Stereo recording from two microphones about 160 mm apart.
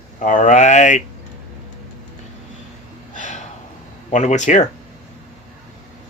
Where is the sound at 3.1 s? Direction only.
50° left (ahead or behind).